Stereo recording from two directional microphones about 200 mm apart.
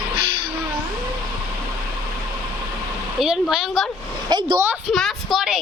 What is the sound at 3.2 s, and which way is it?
Speech, centre (ahead or behind).